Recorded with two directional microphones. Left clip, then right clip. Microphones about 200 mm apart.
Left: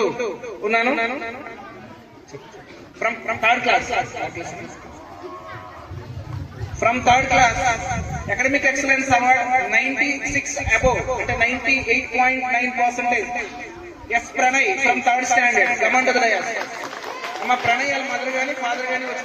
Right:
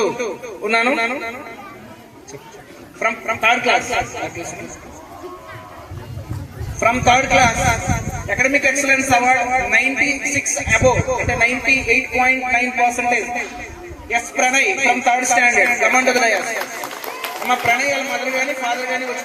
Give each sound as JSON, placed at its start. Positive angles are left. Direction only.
{"t": 0.0, "sound": "a woman's voice", "side_deg": -35}
{"t": 3.0, "sound": "a woman's voice", "side_deg": -35}
{"t": 6.7, "sound": "a woman's voice", "side_deg": -35}